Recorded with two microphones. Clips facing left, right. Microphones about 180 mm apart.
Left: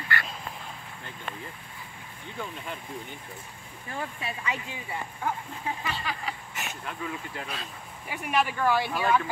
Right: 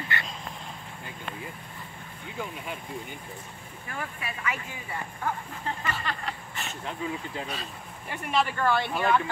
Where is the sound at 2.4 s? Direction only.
10° right (ahead or behind).